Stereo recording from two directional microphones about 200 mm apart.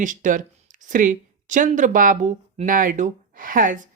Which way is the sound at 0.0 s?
40° right (ahead or behind).